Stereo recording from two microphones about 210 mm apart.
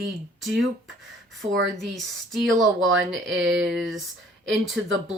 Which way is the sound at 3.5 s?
Centre (ahead or behind).